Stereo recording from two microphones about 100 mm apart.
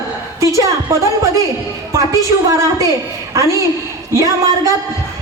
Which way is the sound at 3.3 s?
30° right (ahead or behind).